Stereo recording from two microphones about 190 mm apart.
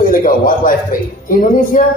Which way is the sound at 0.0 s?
50° left (ahead or behind).